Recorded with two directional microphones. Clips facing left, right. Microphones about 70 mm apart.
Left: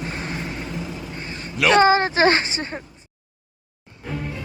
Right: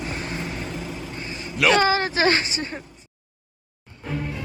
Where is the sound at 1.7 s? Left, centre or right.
Left.